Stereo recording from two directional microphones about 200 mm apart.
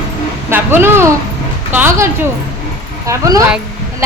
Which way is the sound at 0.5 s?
10° right (ahead or behind).